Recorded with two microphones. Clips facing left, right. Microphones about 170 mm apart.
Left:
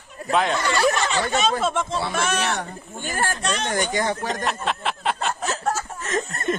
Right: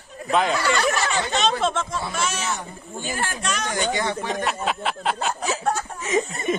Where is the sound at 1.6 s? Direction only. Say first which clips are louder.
Even; 10° left (ahead or behind).